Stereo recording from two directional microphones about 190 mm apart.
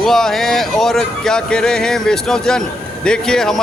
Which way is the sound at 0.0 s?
Centre (ahead or behind).